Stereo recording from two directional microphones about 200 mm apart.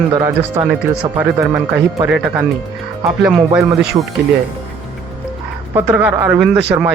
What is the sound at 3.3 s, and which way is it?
Speech, centre (ahead or behind).